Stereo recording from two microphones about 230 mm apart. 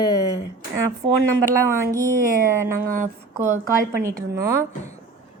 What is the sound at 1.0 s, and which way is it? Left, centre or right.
Speech, centre.